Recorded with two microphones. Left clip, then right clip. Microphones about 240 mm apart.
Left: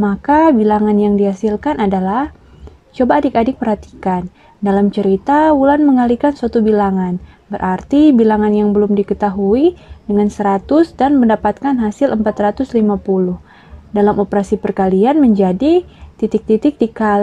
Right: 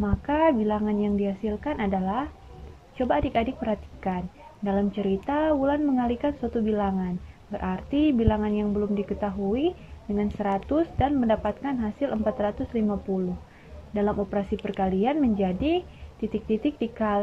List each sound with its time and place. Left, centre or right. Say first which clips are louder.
0.0 s a woman's voice: left 12 dB; left
13.9 s a woman's voice: left 13 dB; left